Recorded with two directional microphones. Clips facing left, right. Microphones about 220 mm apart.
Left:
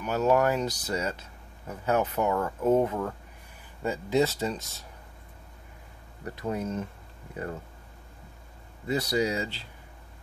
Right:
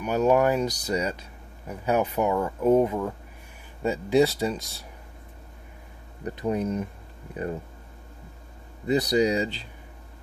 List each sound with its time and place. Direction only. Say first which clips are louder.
0.0 s speech: right 3 dB; 15° right (ahead or behind)
6.2 s speech: right 5 dB; 20° right (ahead or behind)
8.8 s speech: right 5 dB; 20° right (ahead or behind)